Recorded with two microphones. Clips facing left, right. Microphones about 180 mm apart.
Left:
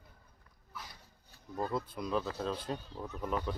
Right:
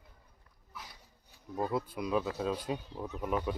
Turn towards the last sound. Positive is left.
turn(degrees=-10)  # may be behind; listen again after turning